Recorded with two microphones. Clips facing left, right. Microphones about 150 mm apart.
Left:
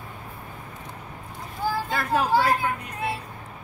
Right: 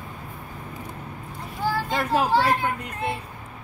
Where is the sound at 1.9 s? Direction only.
10° right (ahead or behind).